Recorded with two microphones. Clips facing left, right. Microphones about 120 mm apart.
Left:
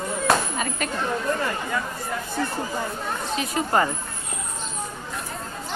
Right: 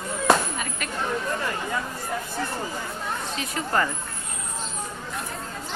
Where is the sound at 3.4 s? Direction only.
20° left (ahead or behind).